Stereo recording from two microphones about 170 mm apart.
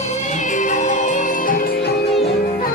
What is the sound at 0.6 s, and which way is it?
Music, 45° left (ahead or behind).